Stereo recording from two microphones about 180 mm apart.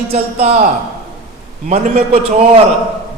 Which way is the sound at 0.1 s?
35° right (ahead or behind).